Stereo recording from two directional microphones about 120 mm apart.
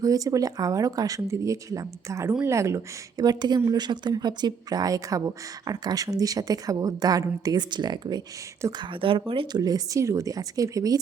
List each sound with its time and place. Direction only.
0.0 s speech: 30° right (ahead or behind); by 9.6 s 50° right (ahead or behind)
9.6 s speech: 30° right (ahead or behind)